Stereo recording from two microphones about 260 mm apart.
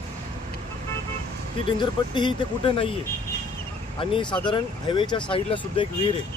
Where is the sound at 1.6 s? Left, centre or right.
Centre.